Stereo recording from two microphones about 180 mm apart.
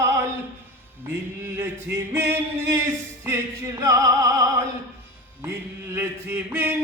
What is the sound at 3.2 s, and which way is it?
Music, 20° right (ahead or behind).